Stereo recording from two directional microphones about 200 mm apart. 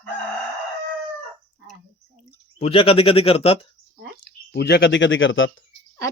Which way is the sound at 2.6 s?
30° left (ahead or behind).